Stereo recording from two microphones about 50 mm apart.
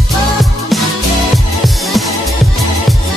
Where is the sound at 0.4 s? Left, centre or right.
Centre.